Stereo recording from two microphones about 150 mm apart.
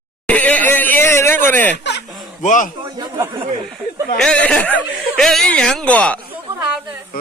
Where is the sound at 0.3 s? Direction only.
10° left (ahead or behind).